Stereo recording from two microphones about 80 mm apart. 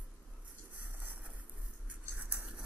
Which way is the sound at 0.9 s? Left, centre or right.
Centre.